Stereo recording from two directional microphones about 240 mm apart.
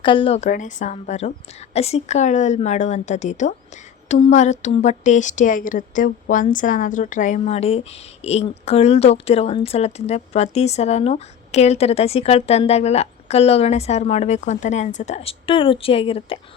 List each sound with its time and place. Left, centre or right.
0.0 s a woman's voice: left